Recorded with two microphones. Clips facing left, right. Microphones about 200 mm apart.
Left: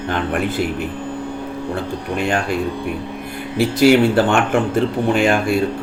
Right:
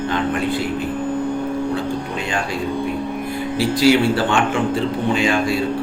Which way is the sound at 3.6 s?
60° left (ahead or behind).